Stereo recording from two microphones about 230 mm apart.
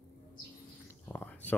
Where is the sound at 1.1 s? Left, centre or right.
Centre.